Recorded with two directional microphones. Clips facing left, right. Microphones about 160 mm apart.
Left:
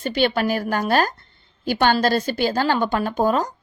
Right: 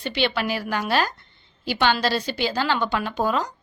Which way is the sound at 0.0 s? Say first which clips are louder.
Left 4 dB; 45° left (ahead or behind).